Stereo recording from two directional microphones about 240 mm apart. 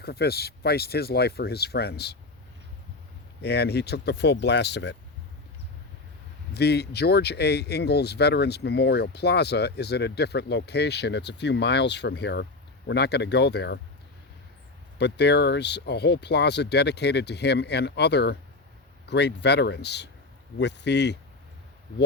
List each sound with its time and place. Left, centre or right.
0.0 s speech: left
3.4 s speech: left
6.5 s speech: left
14.9 s speech: left